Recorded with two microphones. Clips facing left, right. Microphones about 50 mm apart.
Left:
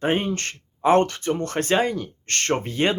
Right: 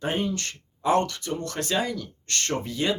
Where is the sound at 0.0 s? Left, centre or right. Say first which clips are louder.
Left 4 dB; left.